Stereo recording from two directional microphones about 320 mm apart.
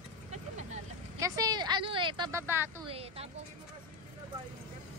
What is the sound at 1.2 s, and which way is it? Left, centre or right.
A woman's voice, centre.